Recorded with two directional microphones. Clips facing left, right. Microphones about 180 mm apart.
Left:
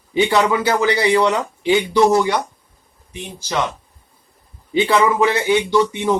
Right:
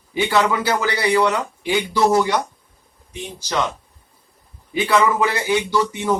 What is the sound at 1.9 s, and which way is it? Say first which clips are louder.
Speech: left 2 dB; 10° right (ahead or behind).